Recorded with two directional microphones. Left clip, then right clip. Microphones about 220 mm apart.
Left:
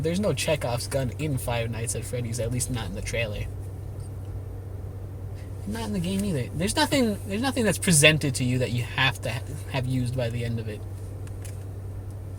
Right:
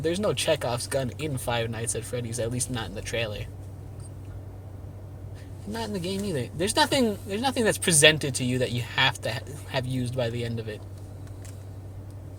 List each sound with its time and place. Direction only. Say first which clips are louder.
0.1 s speech: right 1 dB; 25° right (ahead or behind)
5.8 s speech: even; 30° right (ahead or behind)